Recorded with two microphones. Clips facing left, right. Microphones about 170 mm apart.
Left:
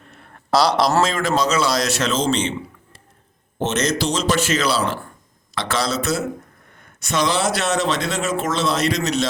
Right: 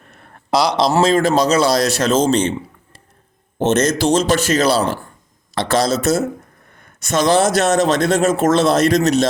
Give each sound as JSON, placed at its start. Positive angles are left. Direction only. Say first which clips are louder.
{"t": 0.5, "sound": "speech", "louder": "right 1 dB", "side_deg": -15}
{"t": 1.0, "sound": "speech", "louder": "right 6 dB", "side_deg": -35}
{"t": 3.6, "sound": "speech", "louder": "right 5 dB", "side_deg": -50}